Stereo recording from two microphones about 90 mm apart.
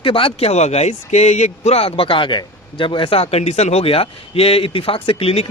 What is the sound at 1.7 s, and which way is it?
A man's voice, 90° left.